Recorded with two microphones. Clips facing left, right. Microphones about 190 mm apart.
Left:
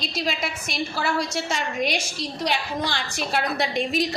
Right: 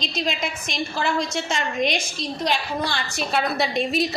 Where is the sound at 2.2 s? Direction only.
15° left (ahead or behind).